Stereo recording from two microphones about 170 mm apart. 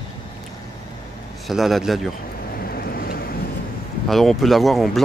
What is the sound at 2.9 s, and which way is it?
Vehicle, 60° left (ahead or behind).